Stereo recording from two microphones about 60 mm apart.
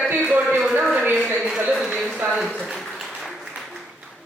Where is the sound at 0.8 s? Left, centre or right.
Centre.